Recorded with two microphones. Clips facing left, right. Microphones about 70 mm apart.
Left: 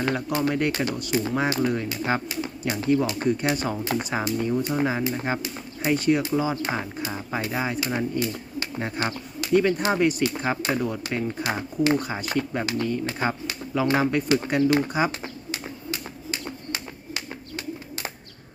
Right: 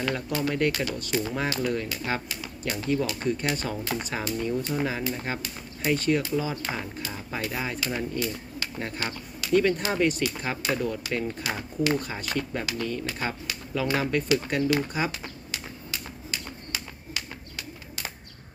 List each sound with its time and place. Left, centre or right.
0.3 s speech: centre
0.7 s speech: left
9.5 s speech: centre
10.6 s speech: left
11.4 s speech: left
15.5 s a sound: left